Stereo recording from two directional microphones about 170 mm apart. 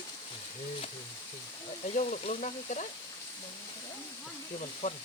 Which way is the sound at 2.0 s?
45° left (ahead or behind).